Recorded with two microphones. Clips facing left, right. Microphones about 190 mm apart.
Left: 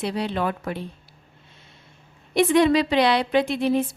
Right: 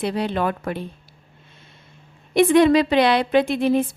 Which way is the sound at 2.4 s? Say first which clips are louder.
Right 3 dB; 50° right (ahead or behind).